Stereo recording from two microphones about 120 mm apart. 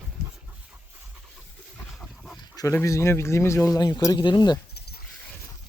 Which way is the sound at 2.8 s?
25° left (ahead or behind).